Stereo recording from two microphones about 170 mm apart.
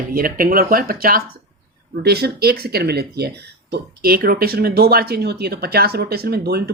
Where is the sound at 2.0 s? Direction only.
70° right (ahead or behind).